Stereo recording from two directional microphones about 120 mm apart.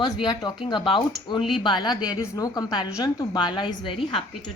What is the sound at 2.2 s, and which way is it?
A woman's voice, 30° left (ahead or behind).